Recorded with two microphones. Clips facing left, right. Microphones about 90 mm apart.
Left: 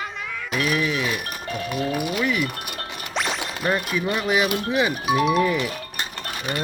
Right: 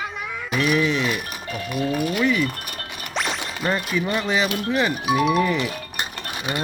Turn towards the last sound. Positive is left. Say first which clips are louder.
# right 1 dB
turn(degrees=-15)  # may be behind; listen again after turning